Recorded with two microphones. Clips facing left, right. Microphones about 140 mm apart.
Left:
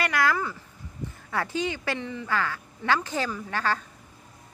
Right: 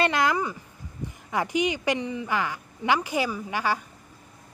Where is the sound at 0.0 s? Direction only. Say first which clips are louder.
Right 2 dB; 20° right (ahead or behind).